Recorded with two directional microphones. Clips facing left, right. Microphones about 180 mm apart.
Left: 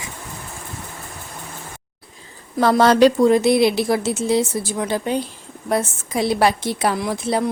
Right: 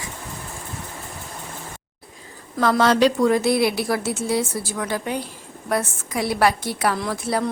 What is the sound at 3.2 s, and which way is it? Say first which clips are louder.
A woman's voice: left 4 dB; 25° left (ahead or behind).